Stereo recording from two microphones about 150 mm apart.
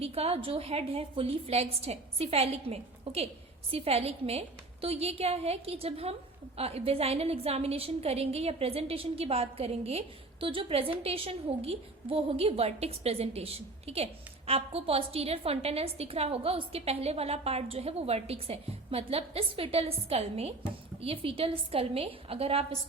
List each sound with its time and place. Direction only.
0.0 s a woman's voice: 40° right (ahead or behind)